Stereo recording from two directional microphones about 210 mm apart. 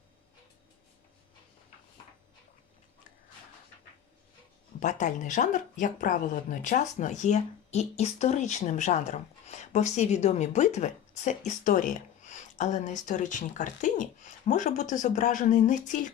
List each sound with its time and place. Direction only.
4.8 s speech: 35° left (ahead or behind)